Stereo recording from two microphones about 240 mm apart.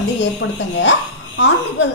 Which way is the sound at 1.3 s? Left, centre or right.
Left.